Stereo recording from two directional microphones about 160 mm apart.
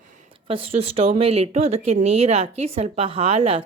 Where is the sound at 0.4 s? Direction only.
35° right (ahead or behind).